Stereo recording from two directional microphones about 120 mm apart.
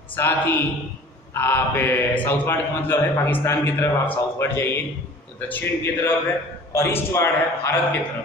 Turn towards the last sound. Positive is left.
turn(degrees=20)  # may be behind; listen again after turning